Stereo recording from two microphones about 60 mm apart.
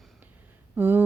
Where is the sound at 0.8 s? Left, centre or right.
Right.